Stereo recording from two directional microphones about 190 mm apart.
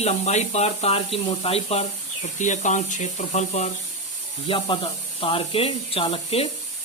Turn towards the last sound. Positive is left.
turn(degrees=30)  # may be behind; listen again after turning